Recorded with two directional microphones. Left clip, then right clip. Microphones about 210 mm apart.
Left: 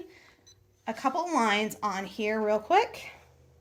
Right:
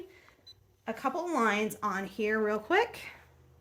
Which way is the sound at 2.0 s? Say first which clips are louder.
Left 1 dB; 65° right (ahead or behind).